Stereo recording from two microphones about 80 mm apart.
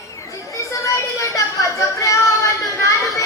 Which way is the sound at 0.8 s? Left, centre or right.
Left.